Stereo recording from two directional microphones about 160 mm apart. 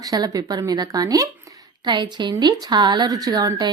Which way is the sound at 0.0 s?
25° right (ahead or behind).